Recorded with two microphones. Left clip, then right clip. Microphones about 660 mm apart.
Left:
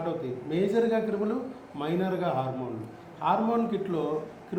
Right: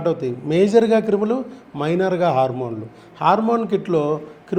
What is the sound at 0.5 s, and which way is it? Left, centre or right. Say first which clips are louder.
A man's voice: right 11 dB; right.